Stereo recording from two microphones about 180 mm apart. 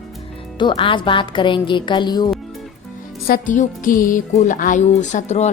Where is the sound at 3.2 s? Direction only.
50° left (ahead or behind).